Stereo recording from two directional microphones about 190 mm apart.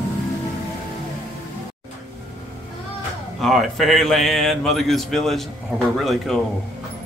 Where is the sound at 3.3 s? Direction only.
Centre (ahead or behind).